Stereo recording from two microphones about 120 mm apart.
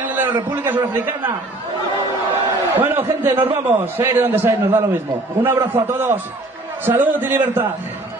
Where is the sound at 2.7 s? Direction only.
20° right (ahead or behind).